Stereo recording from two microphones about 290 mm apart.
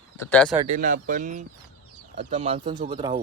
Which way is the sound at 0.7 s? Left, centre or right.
Right.